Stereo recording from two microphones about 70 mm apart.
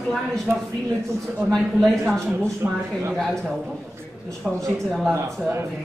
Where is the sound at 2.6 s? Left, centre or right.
Right.